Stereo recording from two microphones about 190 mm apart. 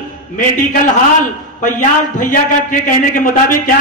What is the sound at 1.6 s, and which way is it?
A man's voice, 45° left (ahead or behind).